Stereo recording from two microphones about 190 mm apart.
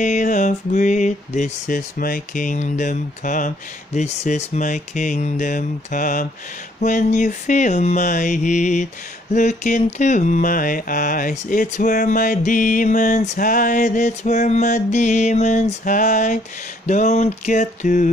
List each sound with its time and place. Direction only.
0.0 s mantra: 40° left (ahead or behind)